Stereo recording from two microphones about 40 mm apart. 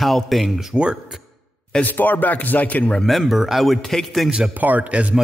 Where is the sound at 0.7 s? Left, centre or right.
Right.